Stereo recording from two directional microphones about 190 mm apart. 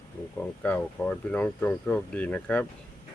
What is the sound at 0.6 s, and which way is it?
Speech, 5° left (ahead or behind).